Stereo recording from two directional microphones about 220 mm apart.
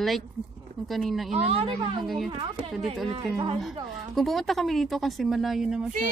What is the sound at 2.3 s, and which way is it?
Speech, 25° right (ahead or behind).